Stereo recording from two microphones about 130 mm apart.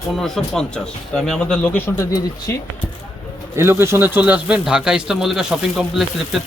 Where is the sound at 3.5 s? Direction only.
20° right (ahead or behind); by 6.0 s 5° right (ahead or behind).